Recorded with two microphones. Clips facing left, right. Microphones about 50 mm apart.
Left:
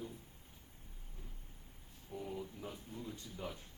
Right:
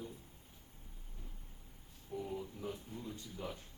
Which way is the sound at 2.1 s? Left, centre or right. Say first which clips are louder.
Right 2 dB; centre.